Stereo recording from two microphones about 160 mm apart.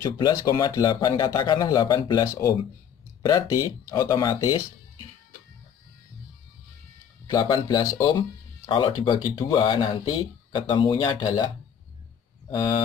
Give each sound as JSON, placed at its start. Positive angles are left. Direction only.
{"t": 0.0, "sound": "speech", "side_deg": 20}
{"t": 7.2, "sound": "speech", "side_deg": 25}